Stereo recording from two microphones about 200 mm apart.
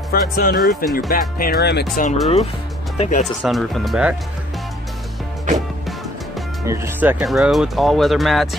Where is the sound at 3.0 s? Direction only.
35° left (ahead or behind).